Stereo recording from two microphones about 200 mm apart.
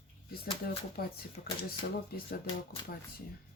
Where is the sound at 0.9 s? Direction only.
50° left (ahead or behind).